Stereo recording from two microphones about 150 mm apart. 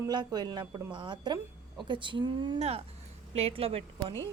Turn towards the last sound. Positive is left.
turn(degrees=-35)  # may be behind; listen again after turning